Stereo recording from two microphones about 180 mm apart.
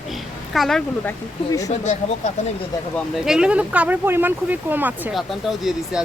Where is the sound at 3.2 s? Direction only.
5° right (ahead or behind).